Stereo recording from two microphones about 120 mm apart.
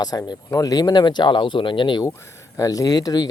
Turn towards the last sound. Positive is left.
turn(degrees=30)  # may be behind; listen again after turning